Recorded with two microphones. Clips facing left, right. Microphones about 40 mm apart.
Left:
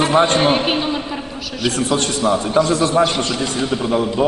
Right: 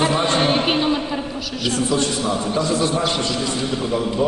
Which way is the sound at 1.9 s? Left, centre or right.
Left.